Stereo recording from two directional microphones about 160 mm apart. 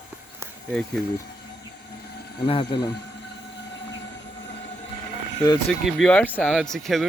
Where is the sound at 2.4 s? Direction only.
30° left (ahead or behind).